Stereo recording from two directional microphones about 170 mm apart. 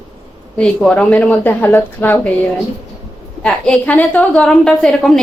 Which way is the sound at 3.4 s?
5° left (ahead or behind).